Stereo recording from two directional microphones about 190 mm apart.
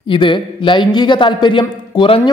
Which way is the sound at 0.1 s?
25° left (ahead or behind).